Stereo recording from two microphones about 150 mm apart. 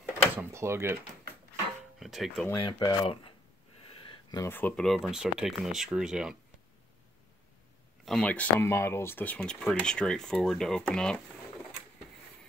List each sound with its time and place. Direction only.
0.0 s speech: 15° right (ahead or behind)
2.0 s speech: centre (ahead or behind)
2.6 s speech: 30° left (ahead or behind)
3.9 s a sound: 35° left (ahead or behind)
4.4 s speech: 15° left (ahead or behind)
4.8 s speech: centre (ahead or behind)
8.0 s speech: 5° left (ahead or behind)